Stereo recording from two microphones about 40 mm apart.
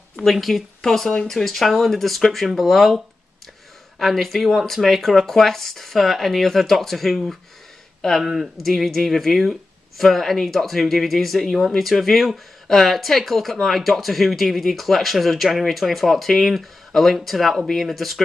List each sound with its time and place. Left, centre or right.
0.2 s speech: centre
1.1 s speech: centre
1.4 s speech: centre
4.0 s speech: centre
8.6 s speech: centre